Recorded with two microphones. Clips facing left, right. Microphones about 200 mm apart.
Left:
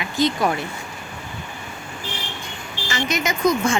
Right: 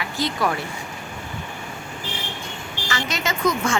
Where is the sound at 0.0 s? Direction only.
20° left (ahead or behind).